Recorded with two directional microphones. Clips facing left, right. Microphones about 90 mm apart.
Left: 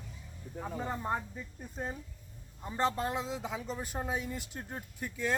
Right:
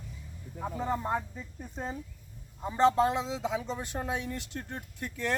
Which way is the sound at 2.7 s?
Centre (ahead or behind).